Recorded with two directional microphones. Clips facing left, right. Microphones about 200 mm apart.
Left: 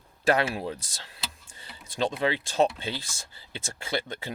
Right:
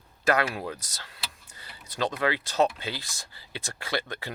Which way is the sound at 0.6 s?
30° left (ahead or behind).